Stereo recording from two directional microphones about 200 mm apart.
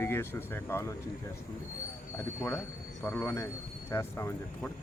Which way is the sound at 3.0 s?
10° left (ahead or behind).